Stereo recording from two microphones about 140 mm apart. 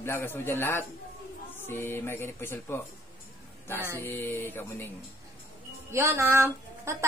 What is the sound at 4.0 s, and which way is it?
Speech, 15° left (ahead or behind).